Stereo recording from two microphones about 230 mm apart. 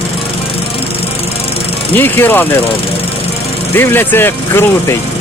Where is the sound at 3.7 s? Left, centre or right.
Centre.